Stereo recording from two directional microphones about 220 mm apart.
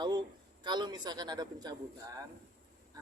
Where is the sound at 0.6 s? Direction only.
20° right (ahead or behind).